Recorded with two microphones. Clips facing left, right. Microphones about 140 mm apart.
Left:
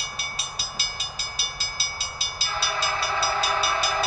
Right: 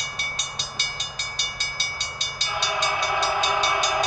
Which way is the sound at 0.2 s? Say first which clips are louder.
Right 1 dB; 5° left (ahead or behind).